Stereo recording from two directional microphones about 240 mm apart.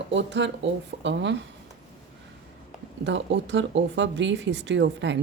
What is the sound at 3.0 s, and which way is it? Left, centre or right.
Speech, right.